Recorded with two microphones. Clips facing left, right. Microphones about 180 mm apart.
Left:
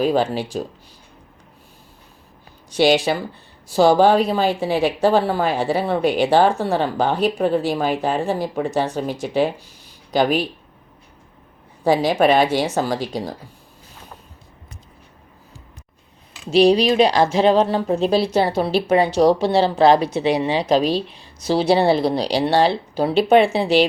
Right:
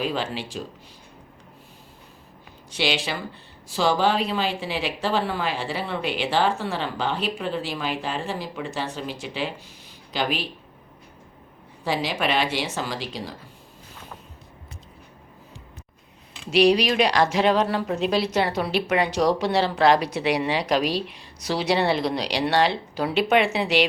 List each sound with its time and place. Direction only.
0.0 s speech: 45° left (ahead or behind)
2.7 s speech: 45° left (ahead or behind)
11.9 s speech: 45° left (ahead or behind)
16.5 s speech: 30° left (ahead or behind)